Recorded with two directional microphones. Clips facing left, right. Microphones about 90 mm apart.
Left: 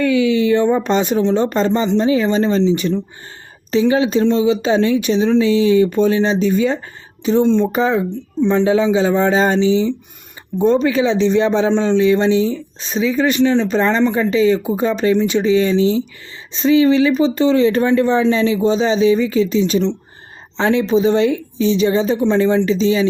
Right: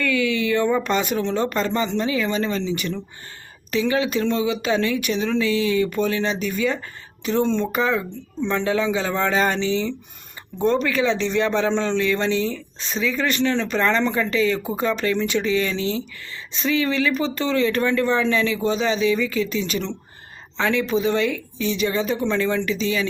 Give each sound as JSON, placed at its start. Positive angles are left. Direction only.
{"t": 0.0, "sound": "a man's voice", "side_deg": 20}